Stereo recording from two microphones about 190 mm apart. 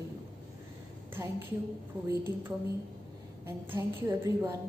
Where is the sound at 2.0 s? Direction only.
15° right (ahead or behind).